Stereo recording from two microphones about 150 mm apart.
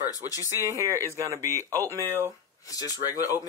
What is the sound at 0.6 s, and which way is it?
Speech, 20° right (ahead or behind).